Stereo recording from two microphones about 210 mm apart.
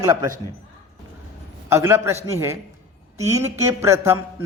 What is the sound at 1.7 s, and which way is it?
Speech, 15° right (ahead or behind).